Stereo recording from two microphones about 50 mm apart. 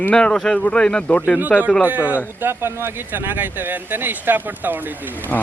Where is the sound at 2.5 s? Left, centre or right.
Right.